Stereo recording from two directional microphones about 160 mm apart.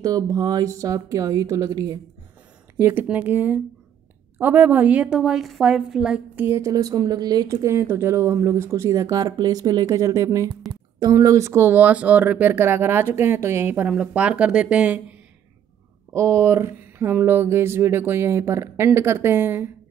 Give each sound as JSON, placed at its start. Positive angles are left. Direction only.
{"t": 0.0, "sound": "a woman's voice", "side_deg": -20}
{"t": 16.1, "sound": "a woman's voice", "side_deg": -20}